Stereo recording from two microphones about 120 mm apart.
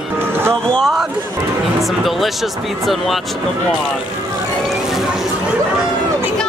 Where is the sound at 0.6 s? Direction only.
Centre (ahead or behind).